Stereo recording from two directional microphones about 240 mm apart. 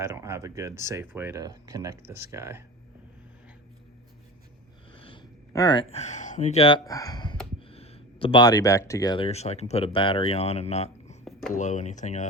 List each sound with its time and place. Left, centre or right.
0.0 s speech: centre
4.9 s speech: left